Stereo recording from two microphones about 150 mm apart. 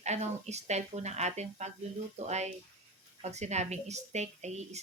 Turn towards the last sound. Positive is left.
turn(degrees=-50)  # may be behind; listen again after turning